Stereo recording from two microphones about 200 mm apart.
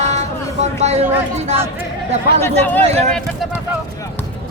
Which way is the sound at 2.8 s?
30° right (ahead or behind).